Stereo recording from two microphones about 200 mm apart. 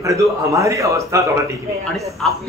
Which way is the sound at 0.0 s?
15° right (ahead or behind).